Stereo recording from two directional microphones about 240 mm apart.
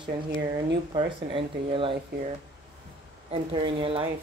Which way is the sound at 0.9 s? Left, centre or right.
Right.